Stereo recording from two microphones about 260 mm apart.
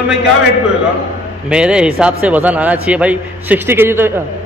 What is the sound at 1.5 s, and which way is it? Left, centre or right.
A man's voice, centre.